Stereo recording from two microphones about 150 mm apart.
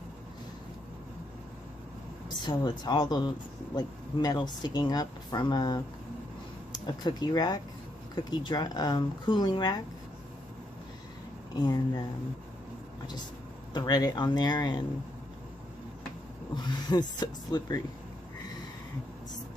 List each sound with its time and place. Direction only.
2.2 s speech: 30° left (ahead or behind)
11.5 s speech: 25° left (ahead or behind)
13.7 s speech: 25° left (ahead or behind)
16.5 s speech: 30° left (ahead or behind)